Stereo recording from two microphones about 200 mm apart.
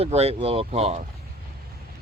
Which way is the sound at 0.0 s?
30° right (ahead or behind).